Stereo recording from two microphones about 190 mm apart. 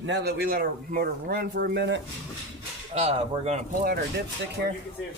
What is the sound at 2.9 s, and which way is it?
Speech, 35° right (ahead or behind).